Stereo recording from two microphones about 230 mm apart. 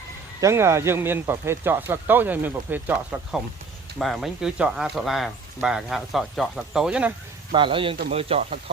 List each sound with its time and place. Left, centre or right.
0.4 s speech: centre
7.5 s speech: right